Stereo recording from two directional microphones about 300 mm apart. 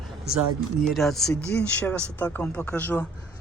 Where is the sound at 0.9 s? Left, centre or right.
Centre.